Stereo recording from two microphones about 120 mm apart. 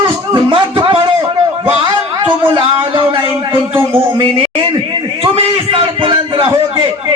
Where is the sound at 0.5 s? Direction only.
45° right (ahead or behind).